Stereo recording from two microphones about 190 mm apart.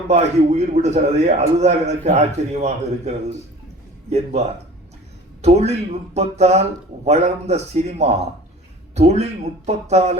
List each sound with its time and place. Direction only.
0.1 s a man's voice: 35° right (ahead or behind)
4.1 s a man's voice: 35° right (ahead or behind)